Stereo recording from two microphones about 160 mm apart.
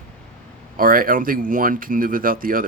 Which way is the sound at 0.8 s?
60° right (ahead or behind).